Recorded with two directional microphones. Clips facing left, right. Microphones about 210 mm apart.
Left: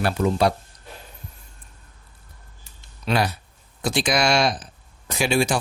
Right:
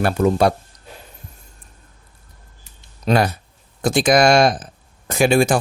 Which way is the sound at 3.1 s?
50° right (ahead or behind).